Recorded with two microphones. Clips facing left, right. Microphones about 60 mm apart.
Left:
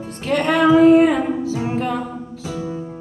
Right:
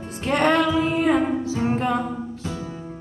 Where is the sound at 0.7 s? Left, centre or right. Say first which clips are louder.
Left 11 dB; left.